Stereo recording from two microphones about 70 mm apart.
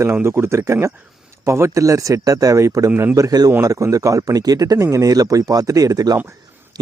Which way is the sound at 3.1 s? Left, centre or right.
Right.